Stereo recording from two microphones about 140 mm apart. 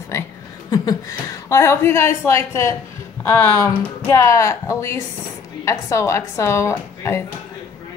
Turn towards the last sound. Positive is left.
turn(degrees=15)  # may be behind; listen again after turning